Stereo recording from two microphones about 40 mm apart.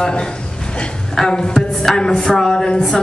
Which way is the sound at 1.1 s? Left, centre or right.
Centre.